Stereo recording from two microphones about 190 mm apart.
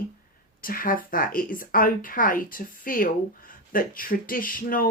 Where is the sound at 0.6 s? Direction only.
50° left (ahead or behind).